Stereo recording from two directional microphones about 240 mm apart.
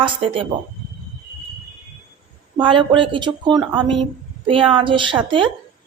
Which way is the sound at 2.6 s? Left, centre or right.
Right.